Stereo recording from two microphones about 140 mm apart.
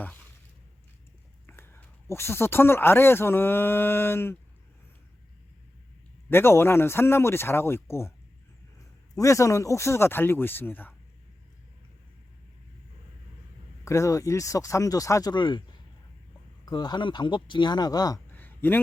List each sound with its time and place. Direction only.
1.5 s speech: 15° left (ahead or behind)
6.3 s speech: 15° left (ahead or behind)
9.1 s speech: 20° left (ahead or behind)
13.8 s speech: 20° left (ahead or behind)
16.6 s speech: 30° left (ahead or behind)
18.3 s a sound: 15° left (ahead or behind)